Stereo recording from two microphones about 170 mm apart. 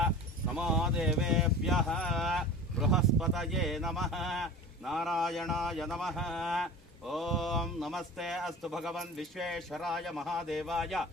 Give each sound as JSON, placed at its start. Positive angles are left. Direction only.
{"t": 0.5, "sound": "speech", "side_deg": -5}